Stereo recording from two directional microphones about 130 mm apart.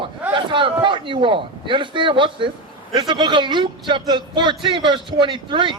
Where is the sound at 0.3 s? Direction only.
40° right (ahead or behind).